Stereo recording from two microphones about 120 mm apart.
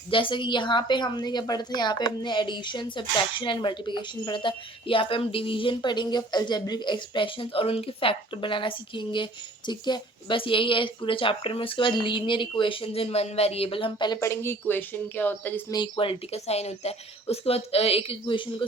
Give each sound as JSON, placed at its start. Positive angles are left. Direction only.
{"t": 0.1, "sound": "a woman's voice", "side_deg": 45}
{"t": 14.2, "sound": "a woman's voice", "side_deg": 20}
{"t": 15.7, "sound": "speech", "side_deg": 45}